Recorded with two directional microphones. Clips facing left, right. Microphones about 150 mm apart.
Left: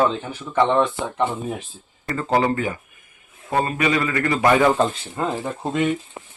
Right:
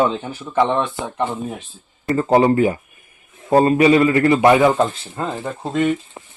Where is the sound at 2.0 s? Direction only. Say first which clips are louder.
Right 6 dB; 25° right (ahead or behind).